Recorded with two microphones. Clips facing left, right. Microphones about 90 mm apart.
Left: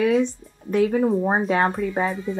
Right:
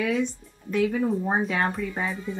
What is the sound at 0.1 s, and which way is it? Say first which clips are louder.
Speech: left 6 dB; 45° left (ahead or behind).